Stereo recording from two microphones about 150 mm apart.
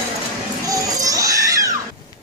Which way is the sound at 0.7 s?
20° right (ahead or behind).